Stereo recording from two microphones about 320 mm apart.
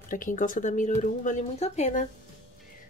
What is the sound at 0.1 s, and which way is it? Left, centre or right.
Speech, left.